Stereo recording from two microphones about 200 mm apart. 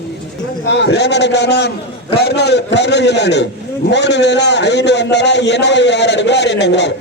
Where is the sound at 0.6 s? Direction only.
60° left (ahead or behind).